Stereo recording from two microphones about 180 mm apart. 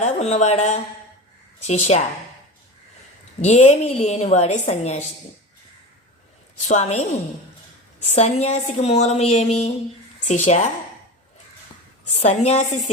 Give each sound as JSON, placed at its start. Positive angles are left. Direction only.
{"t": 0.0, "sound": "a woman's voice", "side_deg": 40}
{"t": 3.4, "sound": "a woman's voice", "side_deg": 40}
{"t": 6.7, "sound": "a woman's voice", "side_deg": 40}
{"t": 8.0, "sound": "a woman's voice", "side_deg": 35}
{"t": 12.1, "sound": "a woman's voice", "side_deg": 40}